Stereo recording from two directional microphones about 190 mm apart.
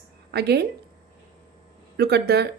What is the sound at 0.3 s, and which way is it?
Speech, 55° right (ahead or behind).